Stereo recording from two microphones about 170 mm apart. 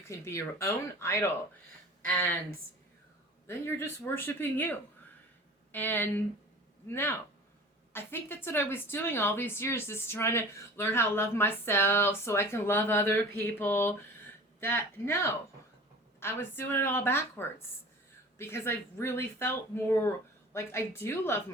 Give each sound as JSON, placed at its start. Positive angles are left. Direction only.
{"t": 0.1, "sound": "a woman's voice", "side_deg": 15}
{"t": 3.4, "sound": "a woman's voice", "side_deg": 15}